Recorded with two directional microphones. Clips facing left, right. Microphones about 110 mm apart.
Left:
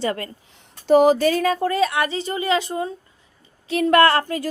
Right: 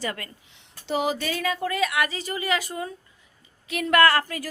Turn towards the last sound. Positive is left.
turn(degrees=25)  # may be behind; listen again after turning